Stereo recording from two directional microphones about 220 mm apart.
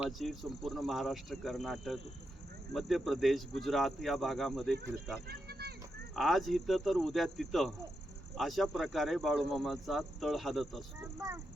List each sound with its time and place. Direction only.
0.0 s speech: centre (ahead or behind)
5.3 s a sound: 45° right (ahead or behind)
6.1 s speech: centre (ahead or behind)